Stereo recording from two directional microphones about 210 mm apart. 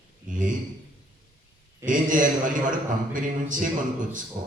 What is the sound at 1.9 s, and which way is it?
A man's voice, 40° right (ahead or behind).